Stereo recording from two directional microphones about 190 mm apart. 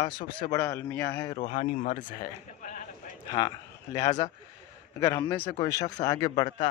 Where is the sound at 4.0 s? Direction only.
35° left (ahead or behind).